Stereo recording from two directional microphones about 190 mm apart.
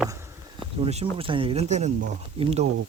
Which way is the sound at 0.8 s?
30° right (ahead or behind).